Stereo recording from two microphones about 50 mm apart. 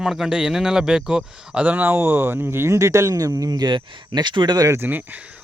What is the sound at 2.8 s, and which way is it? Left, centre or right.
Speech, right.